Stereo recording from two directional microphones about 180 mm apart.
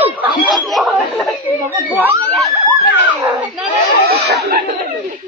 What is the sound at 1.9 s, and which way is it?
Speech, 10° right (ahead or behind).